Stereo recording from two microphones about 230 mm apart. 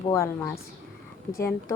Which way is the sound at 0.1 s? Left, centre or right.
Centre.